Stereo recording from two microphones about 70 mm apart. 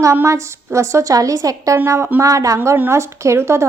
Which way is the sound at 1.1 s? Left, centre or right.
Right.